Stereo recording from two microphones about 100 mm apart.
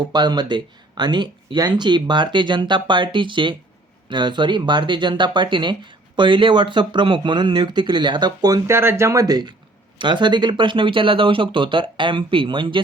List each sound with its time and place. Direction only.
0.1 s speech: 45° right (ahead or behind)
8.7 s speech: 25° right (ahead or behind); by 12.8 s 55° right (ahead or behind)